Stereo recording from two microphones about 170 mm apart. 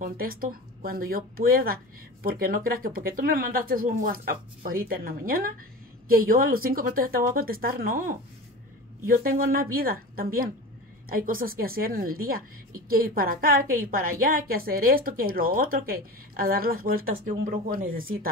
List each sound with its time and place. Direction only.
0.0 s a woman's voice: 55° right (ahead or behind)